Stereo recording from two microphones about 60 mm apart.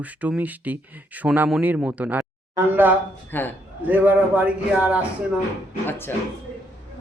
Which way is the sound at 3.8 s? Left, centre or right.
Right.